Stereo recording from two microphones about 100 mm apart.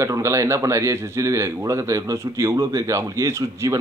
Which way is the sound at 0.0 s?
30° right (ahead or behind).